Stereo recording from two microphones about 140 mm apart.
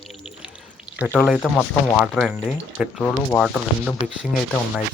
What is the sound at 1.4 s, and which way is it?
Speech, 20° left (ahead or behind).